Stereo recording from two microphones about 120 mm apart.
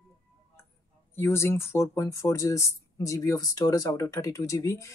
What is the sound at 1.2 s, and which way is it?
Speech, 20° left (ahead or behind).